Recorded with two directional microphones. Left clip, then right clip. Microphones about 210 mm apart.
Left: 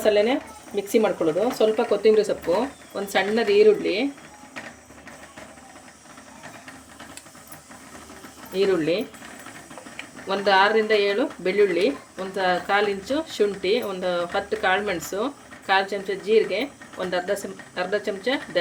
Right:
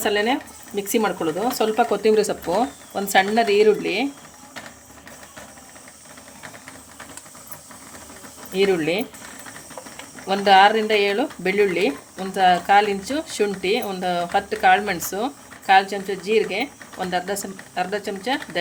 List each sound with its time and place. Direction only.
0.0 s speech: 25° right (ahead or behind)
8.5 s speech: 25° right (ahead or behind)
10.2 s speech: 30° right (ahead or behind)